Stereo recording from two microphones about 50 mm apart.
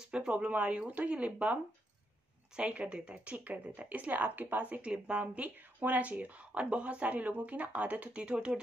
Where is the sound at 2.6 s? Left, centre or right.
Right.